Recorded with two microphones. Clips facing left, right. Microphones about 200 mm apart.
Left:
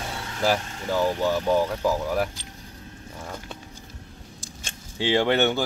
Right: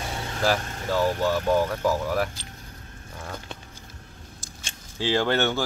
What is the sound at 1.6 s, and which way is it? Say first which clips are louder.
Speech: even; 10° left (ahead or behind).